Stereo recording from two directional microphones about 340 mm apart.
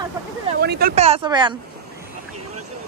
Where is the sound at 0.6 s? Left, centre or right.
Right.